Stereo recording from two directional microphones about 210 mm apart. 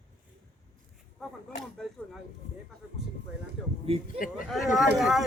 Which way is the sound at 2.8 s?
5° right (ahead or behind).